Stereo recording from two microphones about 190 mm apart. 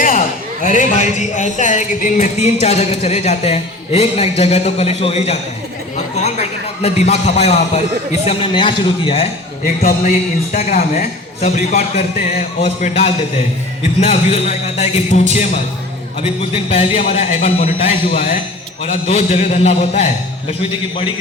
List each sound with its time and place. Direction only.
0.6 s a man's voice: 40° left (ahead or behind)
6.8 s a man's voice: 35° left (ahead or behind)
9.6 s a man's voice: 45° left (ahead or behind)
16.2 s a man's voice: 30° left (ahead or behind)